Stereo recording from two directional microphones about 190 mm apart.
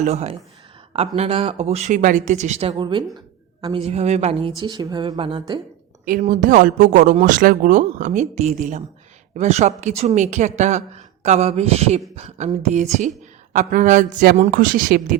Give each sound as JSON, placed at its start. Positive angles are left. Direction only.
{"t": 0.0, "sound": "a woman's voice", "side_deg": -35}
{"t": 6.1, "sound": "a woman's voice", "side_deg": -45}